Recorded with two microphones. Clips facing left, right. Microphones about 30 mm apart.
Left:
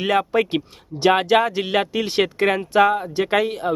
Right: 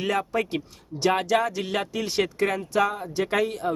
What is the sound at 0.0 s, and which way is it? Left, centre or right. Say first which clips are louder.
Speech: left 6 dB; left.